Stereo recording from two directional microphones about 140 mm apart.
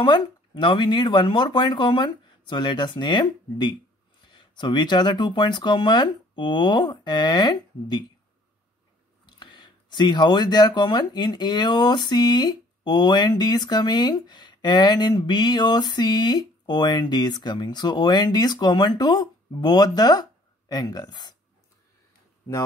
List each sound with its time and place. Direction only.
0.0 s speech: 35° left (ahead or behind)
9.2 s speech: 35° left (ahead or behind)